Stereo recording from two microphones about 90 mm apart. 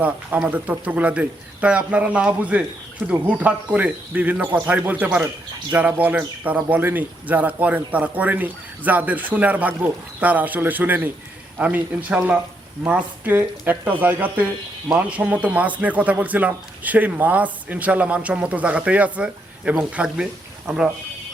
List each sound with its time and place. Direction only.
0.3 s speech: 15° right (ahead or behind)